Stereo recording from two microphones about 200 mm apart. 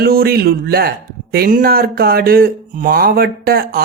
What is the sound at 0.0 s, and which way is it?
Speech, 50° right (ahead or behind).